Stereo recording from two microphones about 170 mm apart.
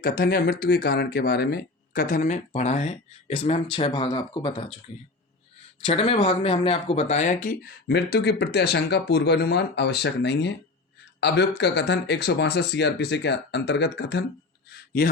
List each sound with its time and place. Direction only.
0.0 s speech: 60° left (ahead or behind); by 4.8 s 30° left (ahead or behind)
5.8 s speech: 35° left (ahead or behind); by 14.3 s 80° left
14.7 s a sound: 60° left (ahead or behind)